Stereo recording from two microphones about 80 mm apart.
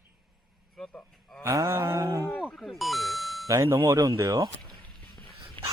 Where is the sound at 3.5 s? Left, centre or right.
Right.